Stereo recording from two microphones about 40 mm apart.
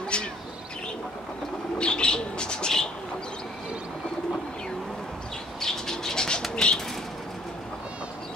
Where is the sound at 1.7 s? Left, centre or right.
Left.